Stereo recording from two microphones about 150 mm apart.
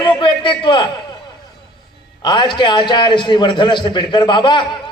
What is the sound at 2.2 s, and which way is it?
A man's voice, 30° left (ahead or behind).